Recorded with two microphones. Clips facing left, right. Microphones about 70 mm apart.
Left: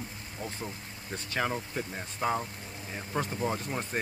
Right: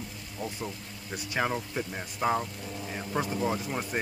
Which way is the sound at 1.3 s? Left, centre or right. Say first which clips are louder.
Right 2 dB; centre.